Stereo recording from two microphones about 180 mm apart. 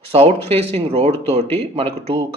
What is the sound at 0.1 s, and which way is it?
Speech, 35° right (ahead or behind).